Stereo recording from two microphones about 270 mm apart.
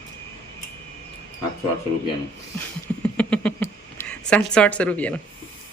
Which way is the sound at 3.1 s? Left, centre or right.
Centre.